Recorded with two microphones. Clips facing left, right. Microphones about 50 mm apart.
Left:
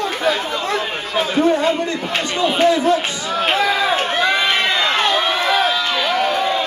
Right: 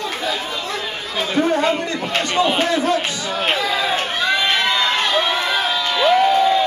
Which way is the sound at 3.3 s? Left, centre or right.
Centre.